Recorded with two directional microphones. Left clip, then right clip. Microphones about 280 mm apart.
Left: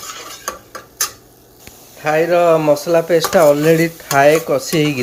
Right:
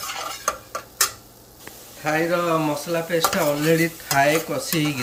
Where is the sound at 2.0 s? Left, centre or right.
Centre.